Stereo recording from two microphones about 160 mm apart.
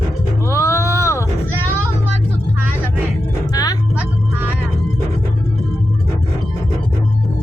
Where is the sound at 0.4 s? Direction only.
20° left (ahead or behind).